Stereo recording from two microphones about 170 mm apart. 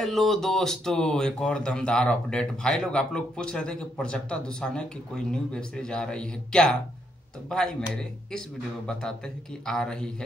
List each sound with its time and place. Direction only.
0.0 s speech: centre (ahead or behind)